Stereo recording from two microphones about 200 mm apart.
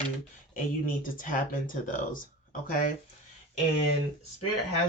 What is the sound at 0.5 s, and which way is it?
Speech, 45° left (ahead or behind).